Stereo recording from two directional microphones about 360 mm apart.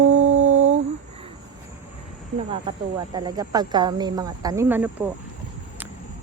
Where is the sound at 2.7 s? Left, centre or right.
Centre.